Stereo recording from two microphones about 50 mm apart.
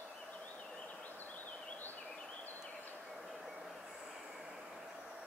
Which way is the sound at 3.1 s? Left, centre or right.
Centre.